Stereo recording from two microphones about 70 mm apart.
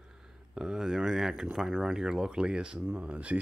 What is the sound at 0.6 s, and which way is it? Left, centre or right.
Speech, centre.